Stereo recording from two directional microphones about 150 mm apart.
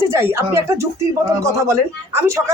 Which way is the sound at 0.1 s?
20° right (ahead or behind).